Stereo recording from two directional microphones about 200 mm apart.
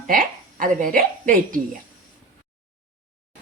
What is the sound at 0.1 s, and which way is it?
A woman's voice, 45° right (ahead or behind).